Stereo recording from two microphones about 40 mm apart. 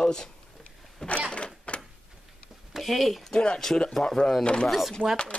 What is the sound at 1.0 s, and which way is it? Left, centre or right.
Power windows, left.